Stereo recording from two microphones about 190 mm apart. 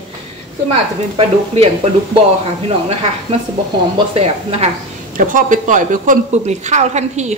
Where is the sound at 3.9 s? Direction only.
30° right (ahead or behind).